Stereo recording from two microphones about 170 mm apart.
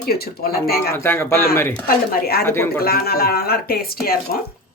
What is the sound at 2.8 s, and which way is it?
Speech, 65° left (ahead or behind).